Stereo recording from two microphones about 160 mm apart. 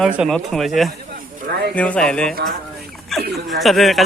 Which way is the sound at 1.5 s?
90° right.